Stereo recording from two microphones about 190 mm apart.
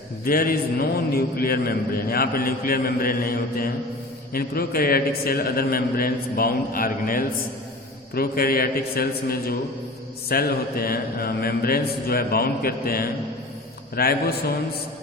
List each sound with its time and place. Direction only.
0.3 s a man's voice: 50° left (ahead or behind)